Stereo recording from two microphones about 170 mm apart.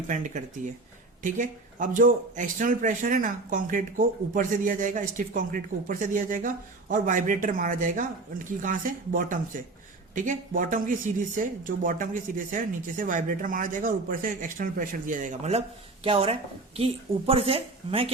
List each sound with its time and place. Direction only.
0.1 s a woman's voice: 50° right (ahead or behind)